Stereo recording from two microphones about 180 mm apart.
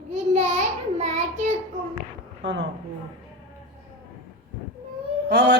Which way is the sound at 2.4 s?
90° right.